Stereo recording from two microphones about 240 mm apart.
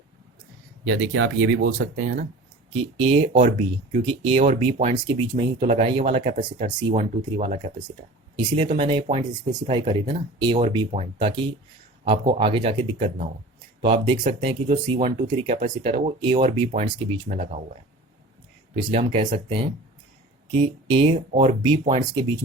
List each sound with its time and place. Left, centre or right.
0.9 s speech: right
3.0 s speech: right
18.8 s speech: right
20.5 s speech: right